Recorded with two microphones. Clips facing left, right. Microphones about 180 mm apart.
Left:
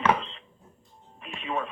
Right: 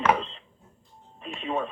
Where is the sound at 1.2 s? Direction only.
35° right (ahead or behind).